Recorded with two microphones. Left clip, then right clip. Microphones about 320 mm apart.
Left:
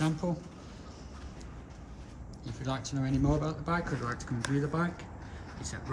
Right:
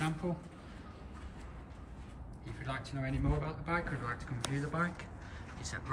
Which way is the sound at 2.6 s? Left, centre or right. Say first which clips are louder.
Left 5 dB; centre.